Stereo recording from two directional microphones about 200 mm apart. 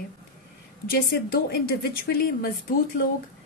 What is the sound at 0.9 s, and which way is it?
A woman's voice, 50° left (ahead or behind).